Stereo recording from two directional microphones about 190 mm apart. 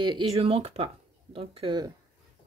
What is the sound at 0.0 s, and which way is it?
Speech, 25° right (ahead or behind).